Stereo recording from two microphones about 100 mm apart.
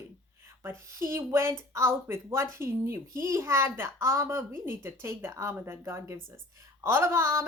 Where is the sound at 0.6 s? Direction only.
25° right (ahead or behind).